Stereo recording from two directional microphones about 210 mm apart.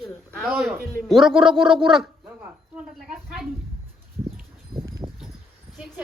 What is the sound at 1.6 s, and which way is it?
Speech, 25° right (ahead or behind).